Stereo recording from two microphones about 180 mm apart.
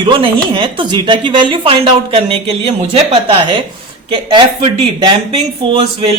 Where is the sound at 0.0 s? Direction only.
25° right (ahead or behind).